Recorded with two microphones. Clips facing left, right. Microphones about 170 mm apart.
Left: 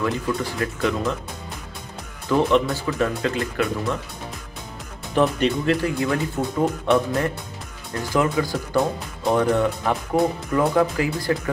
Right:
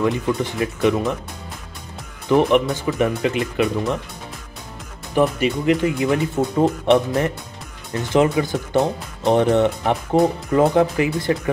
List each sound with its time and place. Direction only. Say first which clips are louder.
0.0 s speech: right 4 dB; 20° right (ahead or behind)
2.2 s speech: right 3 dB; 20° right (ahead or behind)
5.1 s speech: right 1 dB; 15° right (ahead or behind)
8.0 s speech: right 4 dB; 20° right (ahead or behind)